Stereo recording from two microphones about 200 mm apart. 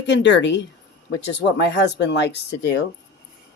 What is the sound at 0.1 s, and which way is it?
Speech, 65° left (ahead or behind).